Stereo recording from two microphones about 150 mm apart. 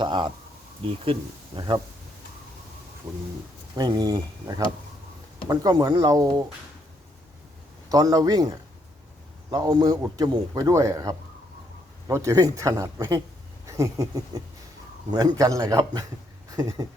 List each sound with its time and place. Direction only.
0.0 s speech: 35° right (ahead or behind)
3.8 s a man's voice: 25° right (ahead or behind)
7.9 s a man's voice: 25° right (ahead or behind)